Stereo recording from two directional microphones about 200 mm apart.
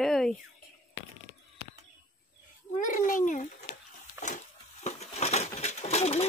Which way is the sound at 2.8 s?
40° left (ahead or behind).